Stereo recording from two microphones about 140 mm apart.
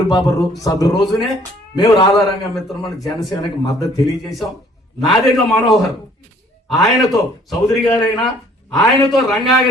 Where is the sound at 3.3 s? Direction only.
25° left (ahead or behind).